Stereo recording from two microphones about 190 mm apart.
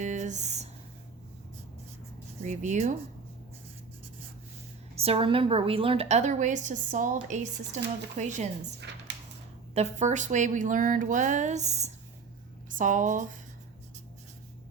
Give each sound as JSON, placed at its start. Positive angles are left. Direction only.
{"t": 0.0, "sound": "a sound", "side_deg": -40}
{"t": 2.4, "sound": "a woman's voice", "side_deg": -40}
{"t": 4.9, "sound": "a woman's voice", "side_deg": -30}
{"t": 9.7, "sound": "a woman's voice", "side_deg": -35}